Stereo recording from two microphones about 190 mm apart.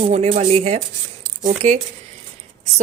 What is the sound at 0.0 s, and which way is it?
Speech, 35° right (ahead or behind).